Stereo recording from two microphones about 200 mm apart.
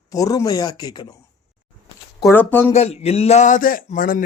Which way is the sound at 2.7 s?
30° left (ahead or behind).